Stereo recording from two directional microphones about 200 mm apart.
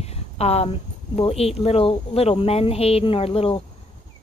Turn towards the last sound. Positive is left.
turn(degrees=25)  # may be behind; listen again after turning